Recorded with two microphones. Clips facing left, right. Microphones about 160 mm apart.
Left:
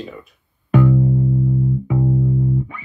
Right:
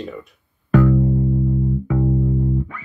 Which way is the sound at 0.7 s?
20° left (ahead or behind).